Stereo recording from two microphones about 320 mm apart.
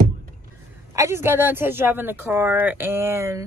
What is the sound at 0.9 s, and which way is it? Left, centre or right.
A woman's voice, centre.